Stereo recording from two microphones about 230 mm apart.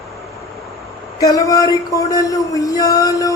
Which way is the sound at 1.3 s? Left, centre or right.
Centre.